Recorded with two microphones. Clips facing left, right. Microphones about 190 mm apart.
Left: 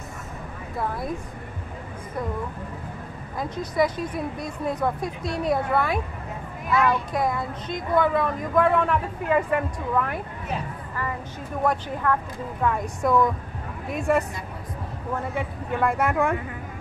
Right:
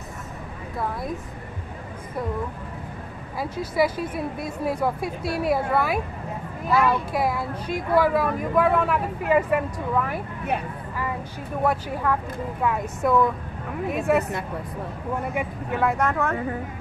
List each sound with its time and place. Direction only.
0.7 s speech: centre (ahead or behind)
3.3 s speech: 5° right (ahead or behind)
11.6 s speech: 10° right (ahead or behind)
15.3 s speech: 5° right (ahead or behind)
16.0 s speech: 10° left (ahead or behind)